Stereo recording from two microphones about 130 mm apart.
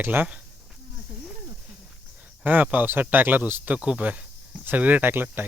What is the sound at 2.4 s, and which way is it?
Speech, 15° right (ahead or behind).